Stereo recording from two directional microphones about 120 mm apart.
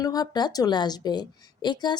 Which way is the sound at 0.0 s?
35° left (ahead or behind).